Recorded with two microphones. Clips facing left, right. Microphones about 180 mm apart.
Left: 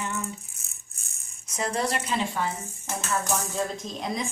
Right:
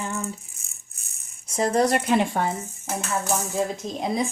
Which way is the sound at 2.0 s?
60° right (ahead or behind).